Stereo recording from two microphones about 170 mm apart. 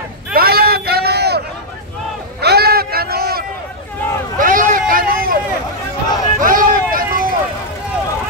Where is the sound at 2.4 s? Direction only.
70° right (ahead or behind).